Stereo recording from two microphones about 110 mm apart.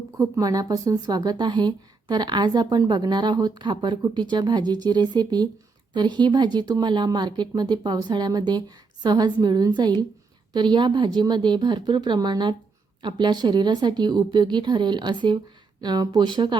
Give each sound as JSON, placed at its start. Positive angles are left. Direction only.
{"t": 0.2, "sound": "a woman's voice", "side_deg": -35}